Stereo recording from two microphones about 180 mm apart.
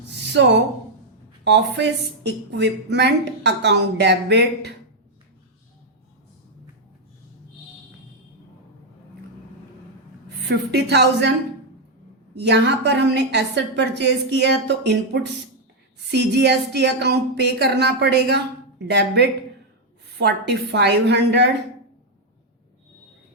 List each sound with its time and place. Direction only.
0.3 s speech: 75° right (ahead or behind)
10.5 s speech: 70° right (ahead or behind)
12.3 s speech: 70° right (ahead or behind)